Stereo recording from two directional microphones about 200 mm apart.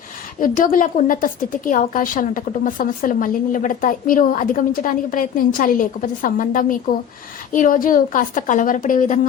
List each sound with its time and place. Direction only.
0.3 s a woman's voice: 40° left (ahead or behind)